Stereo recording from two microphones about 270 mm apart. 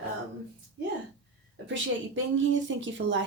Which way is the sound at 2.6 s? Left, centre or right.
Right.